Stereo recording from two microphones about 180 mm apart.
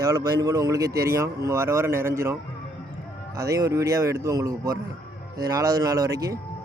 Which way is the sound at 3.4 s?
20° right (ahead or behind).